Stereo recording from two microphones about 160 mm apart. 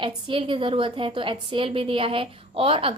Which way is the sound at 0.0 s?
35° right (ahead or behind).